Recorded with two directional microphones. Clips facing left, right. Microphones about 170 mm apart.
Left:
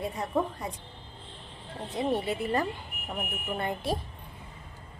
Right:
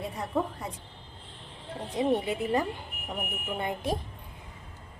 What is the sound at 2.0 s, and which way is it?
A woman's voice, 15° right (ahead or behind).